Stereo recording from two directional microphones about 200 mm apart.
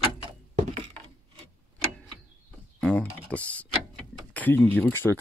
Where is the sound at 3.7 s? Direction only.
5° left (ahead or behind).